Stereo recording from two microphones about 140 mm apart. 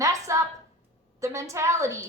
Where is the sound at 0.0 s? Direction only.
20° right (ahead or behind).